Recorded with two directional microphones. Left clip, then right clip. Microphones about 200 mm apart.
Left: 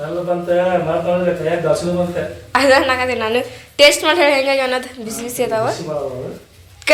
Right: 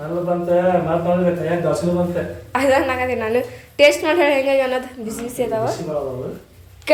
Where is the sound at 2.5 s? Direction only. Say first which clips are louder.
Left 4 dB; centre (ahead or behind).